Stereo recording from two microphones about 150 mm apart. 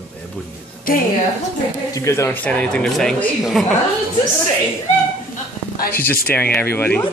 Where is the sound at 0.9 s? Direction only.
70° left (ahead or behind).